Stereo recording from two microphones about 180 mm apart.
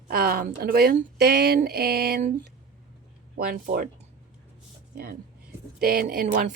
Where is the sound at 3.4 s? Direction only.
55° right (ahead or behind).